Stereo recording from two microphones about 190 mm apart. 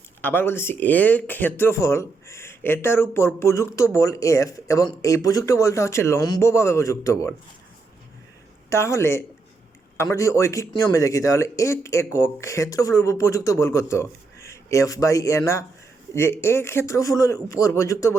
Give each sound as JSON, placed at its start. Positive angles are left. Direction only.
{"t": 0.2, "sound": "speech", "side_deg": 10}
{"t": 8.7, "sound": "speech", "side_deg": 15}